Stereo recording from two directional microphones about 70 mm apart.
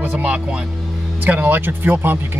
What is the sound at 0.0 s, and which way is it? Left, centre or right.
Speech, centre.